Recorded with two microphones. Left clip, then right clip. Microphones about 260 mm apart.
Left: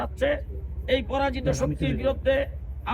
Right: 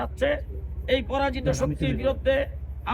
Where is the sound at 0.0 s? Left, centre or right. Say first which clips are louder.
Even; centre.